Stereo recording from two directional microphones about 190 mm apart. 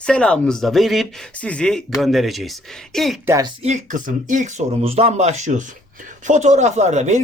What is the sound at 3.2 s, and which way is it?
Speech, 15° right (ahead or behind).